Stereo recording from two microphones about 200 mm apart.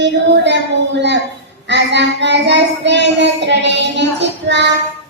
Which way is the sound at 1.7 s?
60° right (ahead or behind).